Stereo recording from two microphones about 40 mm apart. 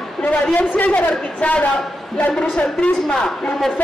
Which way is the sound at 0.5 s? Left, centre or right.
Left.